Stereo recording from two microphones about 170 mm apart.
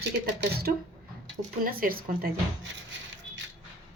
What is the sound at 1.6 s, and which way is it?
Speech, 60° right (ahead or behind).